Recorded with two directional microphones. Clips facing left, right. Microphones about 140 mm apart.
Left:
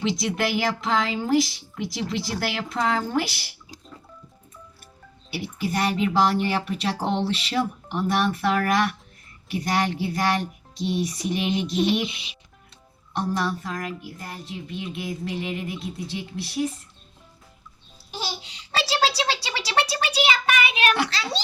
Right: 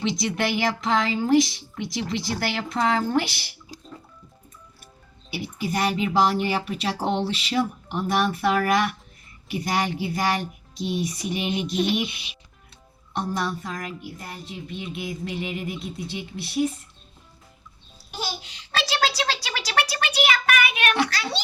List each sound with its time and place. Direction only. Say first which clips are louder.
0.0 s speech: even; 5° left (ahead or behind)
5.3 s speech: even; centre (ahead or behind)
13.1 s speech: left 1 dB; centre (ahead or behind)
18.1 s a sound: even; 30° left (ahead or behind)
20.2 s child singing: right 1 dB; 30° left (ahead or behind)